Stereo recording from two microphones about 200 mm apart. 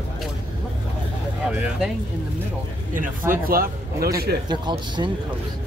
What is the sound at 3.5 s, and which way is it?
Speech, 45° right (ahead or behind).